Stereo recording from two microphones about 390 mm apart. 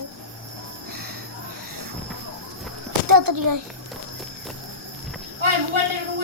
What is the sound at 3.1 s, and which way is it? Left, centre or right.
Speech, right.